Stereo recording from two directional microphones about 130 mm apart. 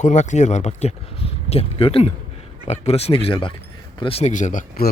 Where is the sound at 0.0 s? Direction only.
70° left (ahead or behind).